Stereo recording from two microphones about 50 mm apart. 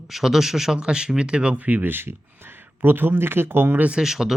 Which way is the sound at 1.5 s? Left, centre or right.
Right.